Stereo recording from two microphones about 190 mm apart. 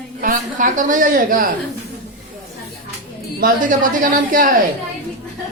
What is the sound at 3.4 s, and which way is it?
Speech, 45° right (ahead or behind).